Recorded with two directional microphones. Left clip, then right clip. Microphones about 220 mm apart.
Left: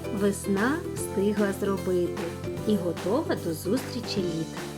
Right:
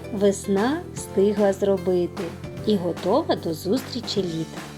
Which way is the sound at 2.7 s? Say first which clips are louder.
Right 5 dB; 15° left (ahead or behind).